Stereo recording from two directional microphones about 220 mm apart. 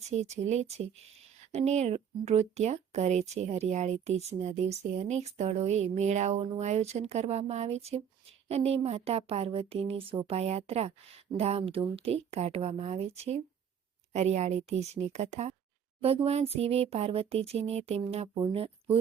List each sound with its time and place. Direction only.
0.1 s speech: 30° right (ahead or behind)